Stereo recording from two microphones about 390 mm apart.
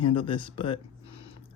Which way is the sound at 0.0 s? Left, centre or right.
Centre.